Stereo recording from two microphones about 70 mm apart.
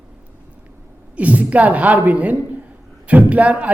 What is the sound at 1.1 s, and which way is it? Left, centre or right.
A man's voice, right.